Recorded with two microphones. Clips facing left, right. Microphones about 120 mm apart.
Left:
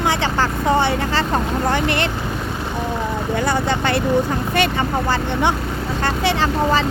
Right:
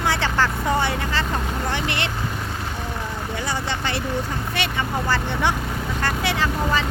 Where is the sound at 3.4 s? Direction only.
55° left (ahead or behind).